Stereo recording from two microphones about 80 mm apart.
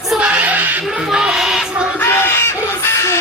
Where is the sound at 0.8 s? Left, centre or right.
Centre.